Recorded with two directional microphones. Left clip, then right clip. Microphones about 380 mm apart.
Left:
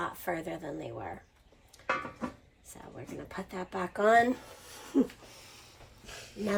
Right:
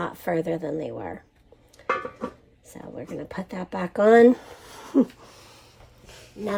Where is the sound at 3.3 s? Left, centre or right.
Right.